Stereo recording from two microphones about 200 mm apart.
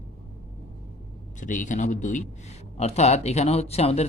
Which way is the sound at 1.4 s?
40° left (ahead or behind).